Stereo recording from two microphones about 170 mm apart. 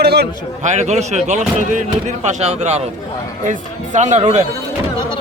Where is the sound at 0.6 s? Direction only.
45° right (ahead or behind).